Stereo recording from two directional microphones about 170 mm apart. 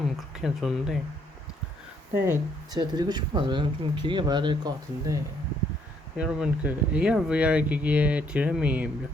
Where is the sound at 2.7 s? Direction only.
25° right (ahead or behind).